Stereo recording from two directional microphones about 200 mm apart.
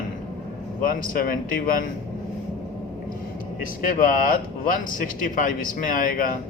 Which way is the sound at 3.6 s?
45° left (ahead or behind).